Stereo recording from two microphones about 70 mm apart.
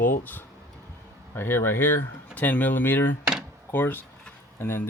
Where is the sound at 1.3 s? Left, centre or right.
Left.